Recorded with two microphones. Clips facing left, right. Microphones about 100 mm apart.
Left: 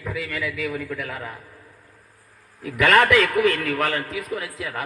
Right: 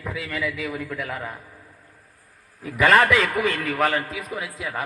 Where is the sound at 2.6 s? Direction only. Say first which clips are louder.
Even; 15° right (ahead or behind).